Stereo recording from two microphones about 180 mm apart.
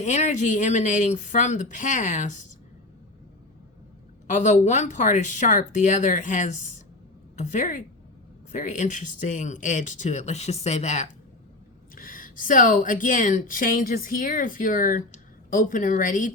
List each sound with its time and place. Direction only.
0.0 s a woman's voice: 40° left (ahead or behind)
4.3 s a woman's voice: 40° left (ahead or behind)